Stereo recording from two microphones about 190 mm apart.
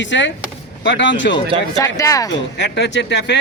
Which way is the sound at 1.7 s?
15° left (ahead or behind).